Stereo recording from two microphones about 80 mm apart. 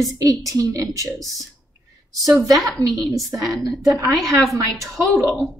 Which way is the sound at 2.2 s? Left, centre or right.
Right.